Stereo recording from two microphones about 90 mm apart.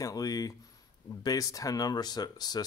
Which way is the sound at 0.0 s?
45° left (ahead or behind).